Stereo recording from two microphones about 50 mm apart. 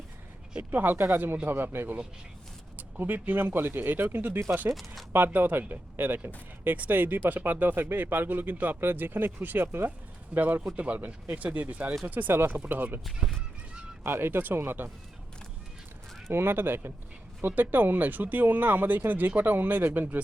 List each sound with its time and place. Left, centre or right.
0.7 s speech: right
7.9 s speech: right
8.8 s speech: right
14.0 s speech: right
16.3 s speech: right